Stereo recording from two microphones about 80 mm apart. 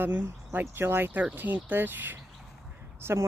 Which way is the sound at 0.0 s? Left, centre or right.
Right.